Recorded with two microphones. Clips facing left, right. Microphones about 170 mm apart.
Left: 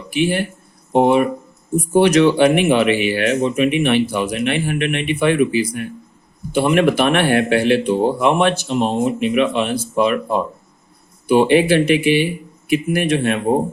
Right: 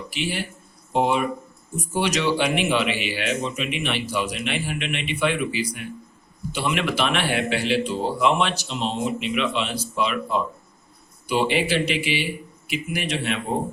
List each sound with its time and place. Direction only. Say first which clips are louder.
0.1 s speech: left 12 dB; 55° left (ahead or behind)